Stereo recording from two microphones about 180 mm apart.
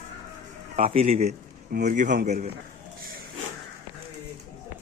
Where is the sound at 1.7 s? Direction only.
50° right (ahead or behind).